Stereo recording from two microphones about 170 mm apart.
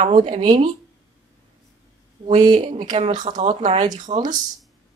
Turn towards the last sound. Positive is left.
turn(degrees=-40)  # may be behind; listen again after turning